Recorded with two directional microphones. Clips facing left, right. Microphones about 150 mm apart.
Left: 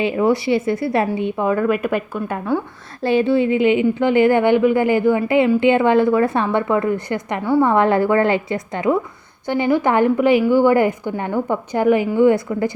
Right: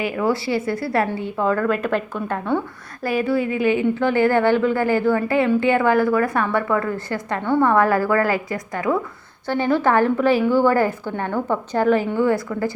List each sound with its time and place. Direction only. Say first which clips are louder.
0.0 s a woman's voice: left 4 dB; 20° left (ahead or behind); by 2.6 s 5° left (ahead or behind)
3.0 s a woman's voice: left 5 dB; 25° left (ahead or behind)